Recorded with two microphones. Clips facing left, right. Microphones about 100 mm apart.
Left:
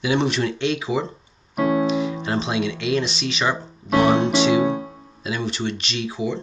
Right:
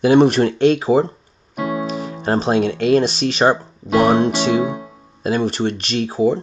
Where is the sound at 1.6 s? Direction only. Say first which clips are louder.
Left 3 dB; 30° left (ahead or behind).